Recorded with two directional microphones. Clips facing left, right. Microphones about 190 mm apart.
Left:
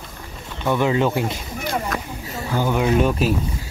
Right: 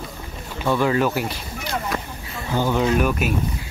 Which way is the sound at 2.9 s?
30° left (ahead or behind).